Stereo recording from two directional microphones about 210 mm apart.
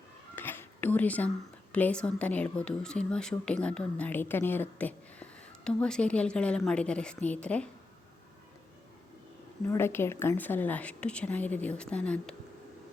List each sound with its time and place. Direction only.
0.3 s a sound: 10° left (ahead or behind)
1.7 s a woman's voice: 5° left (ahead or behind)
9.6 s a woman's voice: 10° left (ahead or behind)